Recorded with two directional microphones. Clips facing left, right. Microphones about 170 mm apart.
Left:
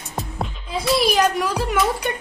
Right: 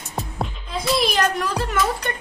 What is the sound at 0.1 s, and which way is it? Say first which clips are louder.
Music: even; centre (ahead or behind).